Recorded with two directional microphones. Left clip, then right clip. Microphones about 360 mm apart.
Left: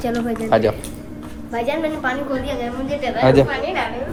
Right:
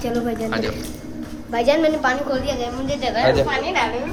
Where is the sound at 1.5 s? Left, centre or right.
Right.